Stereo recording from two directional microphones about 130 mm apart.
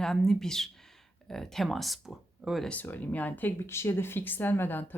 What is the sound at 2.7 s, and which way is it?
Speech, 15° left (ahead or behind).